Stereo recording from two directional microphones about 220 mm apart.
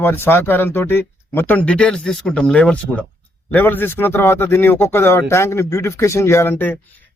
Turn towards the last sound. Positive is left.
turn(degrees=10)  # may be behind; listen again after turning